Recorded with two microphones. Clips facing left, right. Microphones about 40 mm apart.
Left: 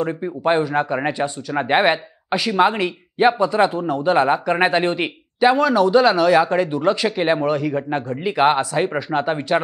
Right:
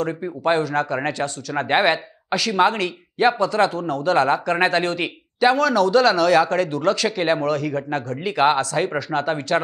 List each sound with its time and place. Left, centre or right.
0.0 s speech: centre